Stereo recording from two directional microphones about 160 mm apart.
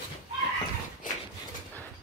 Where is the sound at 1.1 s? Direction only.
55° left (ahead or behind).